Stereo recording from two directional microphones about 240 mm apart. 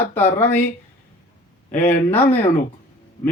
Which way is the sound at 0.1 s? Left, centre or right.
Centre.